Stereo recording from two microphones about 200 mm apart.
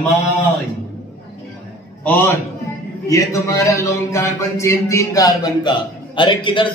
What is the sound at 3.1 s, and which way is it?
Speech, 15° left (ahead or behind).